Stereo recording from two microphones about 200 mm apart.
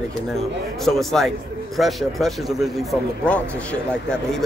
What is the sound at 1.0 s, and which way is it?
A man's voice, centre (ahead or behind).